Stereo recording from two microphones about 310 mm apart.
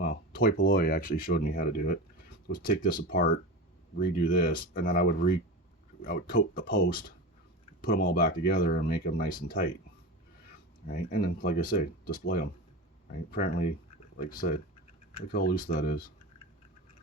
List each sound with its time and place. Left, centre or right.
0.0 s speech: left
10.8 s speech: left